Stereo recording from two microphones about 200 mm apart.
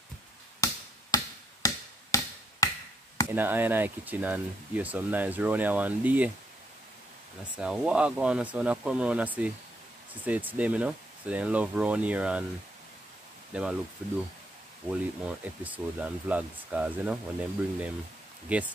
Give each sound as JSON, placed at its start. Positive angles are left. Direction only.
{"t": 0.6, "sound": "a sound", "side_deg": 15}
{"t": 3.3, "sound": "speech", "side_deg": -10}
{"t": 7.5, "sound": "speech", "side_deg": -5}
{"t": 13.5, "sound": "speech", "side_deg": -5}
{"t": 15.6, "sound": "speech", "side_deg": -5}